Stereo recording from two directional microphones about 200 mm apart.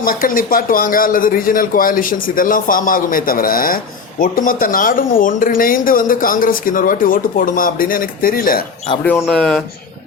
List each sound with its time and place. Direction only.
0.0 s speech: 45° left (ahead or behind)
9.2 s speech: 5° left (ahead or behind)